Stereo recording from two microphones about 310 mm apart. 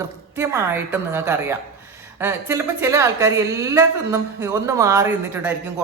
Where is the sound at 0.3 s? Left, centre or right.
Centre.